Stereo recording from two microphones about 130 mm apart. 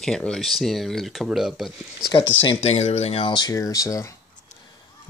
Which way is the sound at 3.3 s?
30° left (ahead or behind).